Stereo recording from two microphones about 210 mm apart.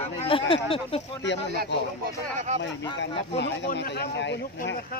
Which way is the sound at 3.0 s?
55° left (ahead or behind).